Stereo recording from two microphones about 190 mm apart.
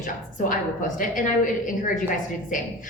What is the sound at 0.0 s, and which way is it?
A woman's voice, 45° left (ahead or behind).